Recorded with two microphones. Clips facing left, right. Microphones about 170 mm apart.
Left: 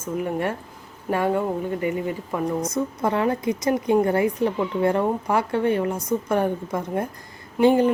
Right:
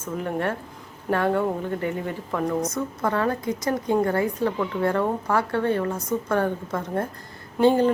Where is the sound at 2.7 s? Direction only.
20° left (ahead or behind).